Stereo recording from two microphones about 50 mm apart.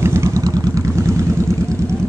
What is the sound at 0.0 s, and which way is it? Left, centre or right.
Vehicle, right.